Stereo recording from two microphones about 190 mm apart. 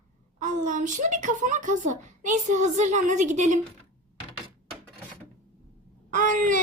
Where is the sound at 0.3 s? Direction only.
40° right (ahead or behind).